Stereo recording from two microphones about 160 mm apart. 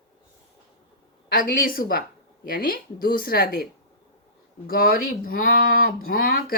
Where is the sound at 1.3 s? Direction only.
65° left (ahead or behind).